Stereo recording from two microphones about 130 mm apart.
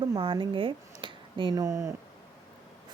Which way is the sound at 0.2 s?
40° right (ahead or behind).